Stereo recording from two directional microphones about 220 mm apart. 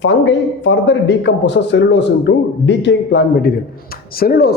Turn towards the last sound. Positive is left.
turn(degrees=45)  # may be behind; listen again after turning